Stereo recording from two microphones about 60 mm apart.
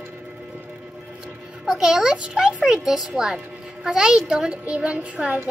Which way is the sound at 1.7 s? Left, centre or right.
Centre.